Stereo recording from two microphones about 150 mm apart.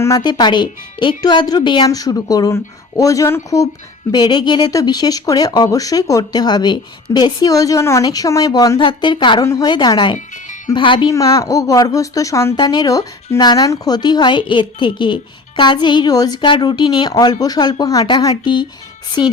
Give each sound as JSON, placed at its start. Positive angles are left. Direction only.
{"t": 0.0, "sound": "speech", "side_deg": 25}